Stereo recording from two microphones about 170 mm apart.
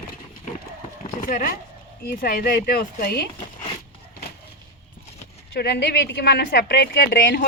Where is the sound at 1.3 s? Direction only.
55° left (ahead or behind); by 3.2 s 70° left (ahead or behind).